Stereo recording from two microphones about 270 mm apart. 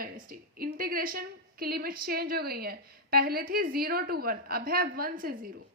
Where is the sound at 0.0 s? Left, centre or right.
Right.